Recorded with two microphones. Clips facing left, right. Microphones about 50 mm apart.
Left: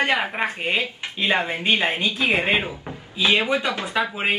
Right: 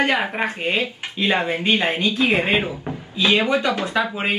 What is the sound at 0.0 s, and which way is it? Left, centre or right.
Speech, centre.